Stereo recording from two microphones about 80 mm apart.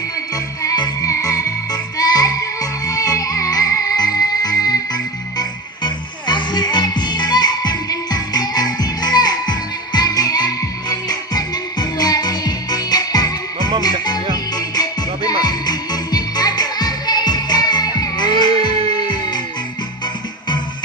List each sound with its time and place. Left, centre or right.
0.7 s music: left
6.2 s music: left